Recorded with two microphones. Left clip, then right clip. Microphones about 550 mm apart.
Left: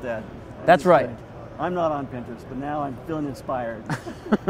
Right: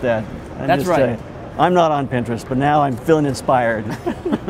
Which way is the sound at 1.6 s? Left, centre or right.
Right.